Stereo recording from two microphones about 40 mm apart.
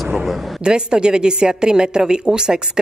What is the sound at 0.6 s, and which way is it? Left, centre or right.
A woman's voice, right.